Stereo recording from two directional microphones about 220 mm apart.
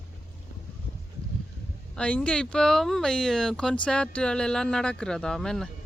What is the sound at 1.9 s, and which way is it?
Speech, 5° left (ahead or behind).